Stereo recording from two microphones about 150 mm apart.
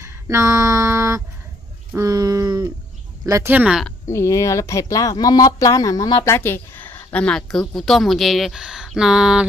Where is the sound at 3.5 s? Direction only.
5° right (ahead or behind).